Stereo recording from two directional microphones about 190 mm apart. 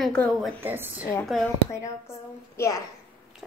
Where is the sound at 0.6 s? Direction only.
10° right (ahead or behind).